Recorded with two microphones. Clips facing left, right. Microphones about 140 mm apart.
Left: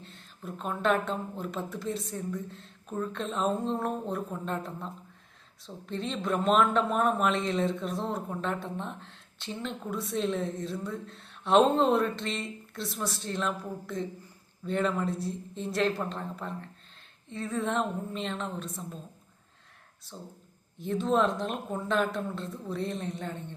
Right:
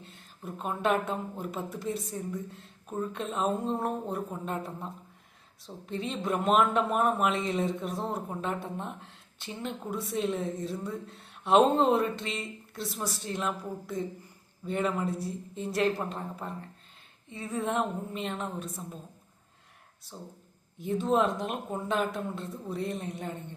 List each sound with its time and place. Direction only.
0.0 s a sound: 10° right (ahead or behind)
0.8 s speech: 10° right (ahead or behind)
20.1 s speech: 10° right (ahead or behind)